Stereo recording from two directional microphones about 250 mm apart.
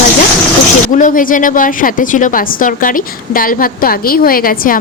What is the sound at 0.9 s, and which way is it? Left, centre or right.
A woman's voice, left.